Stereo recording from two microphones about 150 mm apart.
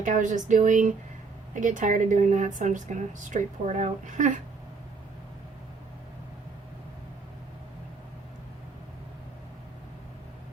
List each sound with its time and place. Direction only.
0.0 s a woman's voice: 55° right (ahead or behind)